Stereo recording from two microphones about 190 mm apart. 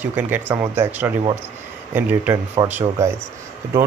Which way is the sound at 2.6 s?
25° right (ahead or behind).